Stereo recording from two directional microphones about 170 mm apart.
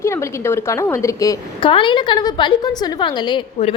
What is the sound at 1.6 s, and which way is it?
A woman's voice, 30° left (ahead or behind).